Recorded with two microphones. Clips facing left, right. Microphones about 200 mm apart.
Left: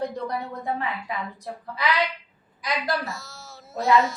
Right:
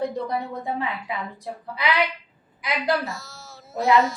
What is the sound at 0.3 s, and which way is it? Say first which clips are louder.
Speech: right 1 dB; 15° right (ahead or behind).